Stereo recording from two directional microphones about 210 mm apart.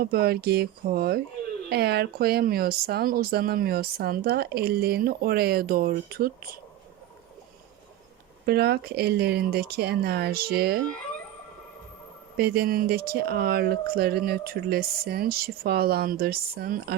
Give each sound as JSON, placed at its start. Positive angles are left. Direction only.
{"t": 0.0, "sound": "speech", "side_deg": -45}
{"t": 8.4, "sound": "speech", "side_deg": -50}
{"t": 12.4, "sound": "speech", "side_deg": -50}